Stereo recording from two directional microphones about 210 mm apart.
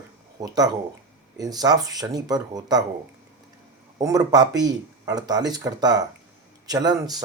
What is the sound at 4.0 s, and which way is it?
Speech, 15° right (ahead or behind).